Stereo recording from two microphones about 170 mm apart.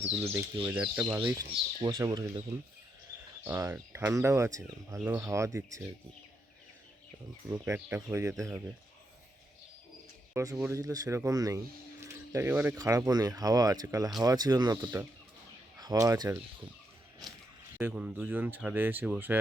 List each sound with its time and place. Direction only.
0.7 s speech: 10° right (ahead or behind)
3.4 s speech: 15° right (ahead or behind)
4.9 s speech: 10° right (ahead or behind)
7.5 s speech: 15° right (ahead or behind)
10.3 s speech: 15° right (ahead or behind)
17.7 s speech: 10° right (ahead or behind)